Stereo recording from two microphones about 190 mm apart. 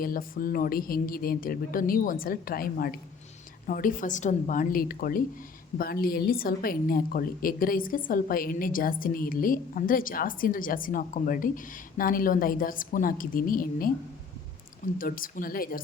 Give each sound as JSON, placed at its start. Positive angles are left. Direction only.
{"t": 0.0, "sound": "a woman's voice", "side_deg": 50}
{"t": 14.9, "sound": "a woman's voice", "side_deg": 45}